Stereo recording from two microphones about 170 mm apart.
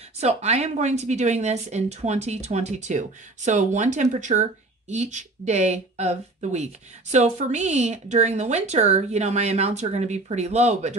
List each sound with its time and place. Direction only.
0.2 s speech: 40° right (ahead or behind)